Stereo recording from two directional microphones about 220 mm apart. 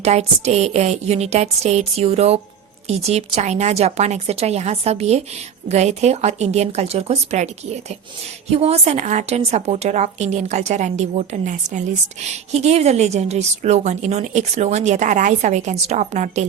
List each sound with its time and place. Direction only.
0.0 s a woman's voice: 30° right (ahead or behind)